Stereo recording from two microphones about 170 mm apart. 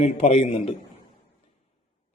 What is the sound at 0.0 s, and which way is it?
Speech, 40° left (ahead or behind).